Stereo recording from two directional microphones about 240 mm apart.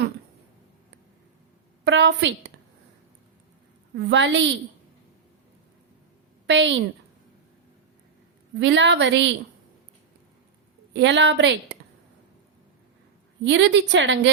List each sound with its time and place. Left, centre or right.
1.8 s a woman's voice: right
3.9 s a woman's voice: right
6.5 s a woman's voice: right
8.5 s a woman's voice: right
10.9 s a woman's voice: right
13.4 s a woman's voice: right